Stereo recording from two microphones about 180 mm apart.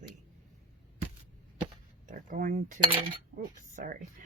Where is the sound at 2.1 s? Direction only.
50° right (ahead or behind).